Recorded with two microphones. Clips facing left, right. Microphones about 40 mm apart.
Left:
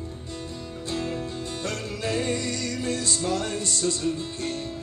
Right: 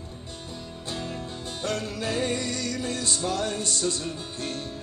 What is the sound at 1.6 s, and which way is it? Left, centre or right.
Music, right.